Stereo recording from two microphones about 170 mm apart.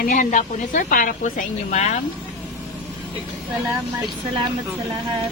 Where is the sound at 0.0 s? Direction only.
55° left (ahead or behind).